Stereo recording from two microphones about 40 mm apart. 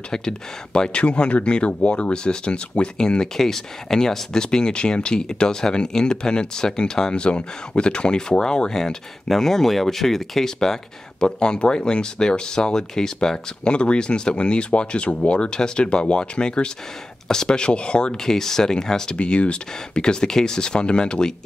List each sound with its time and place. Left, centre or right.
0.1 s speech: centre
18.1 s speech: centre
19.1 s speech: left